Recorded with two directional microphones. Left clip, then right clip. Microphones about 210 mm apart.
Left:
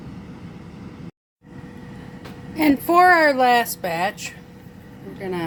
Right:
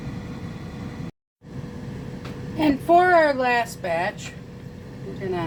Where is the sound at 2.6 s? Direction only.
55° left (ahead or behind).